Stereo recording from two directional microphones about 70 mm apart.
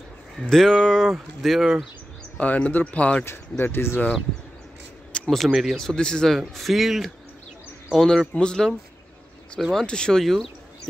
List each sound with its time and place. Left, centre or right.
0.4 s speech: centre
2.3 s speech: centre
3.3 s speech: left
5.1 s a sound: centre
5.5 s speech: centre
5.8 s speech: centre